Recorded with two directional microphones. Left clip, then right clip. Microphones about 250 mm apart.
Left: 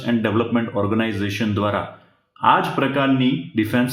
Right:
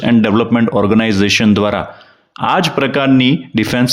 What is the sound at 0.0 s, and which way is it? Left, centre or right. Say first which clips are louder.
Speech: right 8 dB; right.